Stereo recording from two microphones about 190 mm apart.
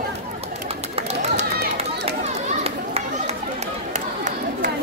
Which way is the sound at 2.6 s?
35° right (ahead or behind).